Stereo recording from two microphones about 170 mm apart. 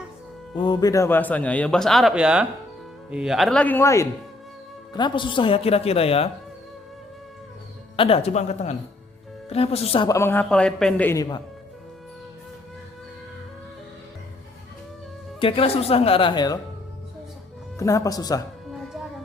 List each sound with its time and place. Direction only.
0.5 s a man's voice: 25° left (ahead or behind)
4.9 s speech: 25° left (ahead or behind)
7.9 s speech: 35° left (ahead or behind)
10.1 s a man's voice: 15° left (ahead or behind)
15.4 s speech: 30° left (ahead or behind)
17.7 s speech: 20° left (ahead or behind)